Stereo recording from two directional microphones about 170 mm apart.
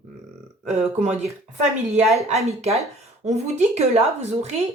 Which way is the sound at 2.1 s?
40° right (ahead or behind).